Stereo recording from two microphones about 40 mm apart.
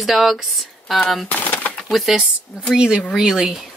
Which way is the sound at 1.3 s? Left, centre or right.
Left.